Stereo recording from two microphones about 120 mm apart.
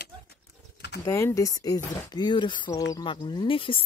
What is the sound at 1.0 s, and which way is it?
Speech, 25° left (ahead or behind).